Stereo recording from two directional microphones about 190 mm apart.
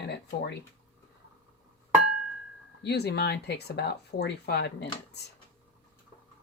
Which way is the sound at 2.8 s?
60° left (ahead or behind).